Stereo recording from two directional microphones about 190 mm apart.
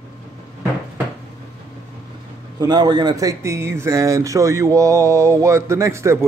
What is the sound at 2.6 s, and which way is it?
Speech, 20° right (ahead or behind).